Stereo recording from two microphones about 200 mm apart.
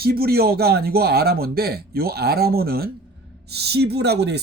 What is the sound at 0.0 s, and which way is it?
Speech, 50° right (ahead or behind).